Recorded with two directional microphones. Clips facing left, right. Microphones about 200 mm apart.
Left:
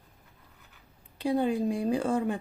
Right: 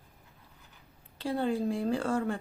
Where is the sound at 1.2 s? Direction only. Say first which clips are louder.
Left 3 dB; 15° left (ahead or behind).